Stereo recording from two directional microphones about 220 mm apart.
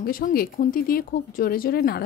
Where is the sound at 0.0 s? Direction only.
40° left (ahead or behind).